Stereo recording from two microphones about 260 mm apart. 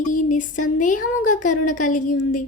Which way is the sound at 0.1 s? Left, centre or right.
Left.